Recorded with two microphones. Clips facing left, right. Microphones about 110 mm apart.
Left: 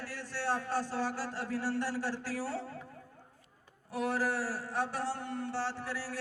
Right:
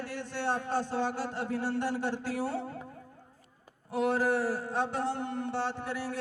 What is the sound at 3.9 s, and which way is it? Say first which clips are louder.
A man's voice: right 5 dB; 25° right (ahead or behind).